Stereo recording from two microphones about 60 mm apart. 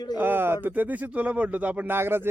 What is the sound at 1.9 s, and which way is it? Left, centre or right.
Speech, right.